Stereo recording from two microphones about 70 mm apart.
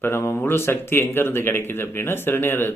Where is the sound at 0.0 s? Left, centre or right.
Left.